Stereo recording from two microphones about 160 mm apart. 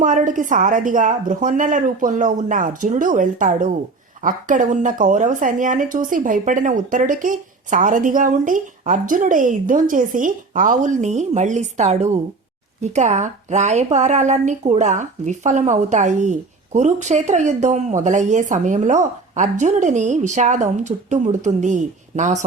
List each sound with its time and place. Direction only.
0.0 s a woman's voice: 55° right (ahead or behind)